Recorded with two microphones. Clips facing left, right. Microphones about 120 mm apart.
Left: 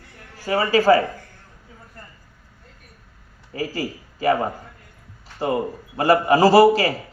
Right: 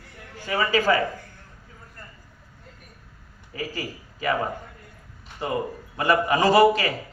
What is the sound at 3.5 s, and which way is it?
Speech, 35° left (ahead or behind).